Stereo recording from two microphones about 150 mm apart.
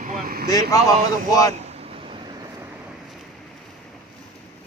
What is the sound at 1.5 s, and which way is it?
Vehicle, 45° right (ahead or behind).